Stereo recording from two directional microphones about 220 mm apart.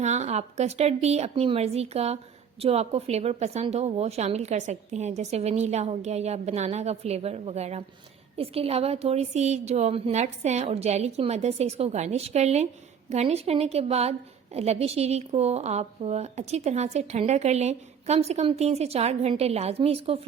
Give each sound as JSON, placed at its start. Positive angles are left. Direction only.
{"t": 0.0, "sound": "a woman's voice", "side_deg": -30}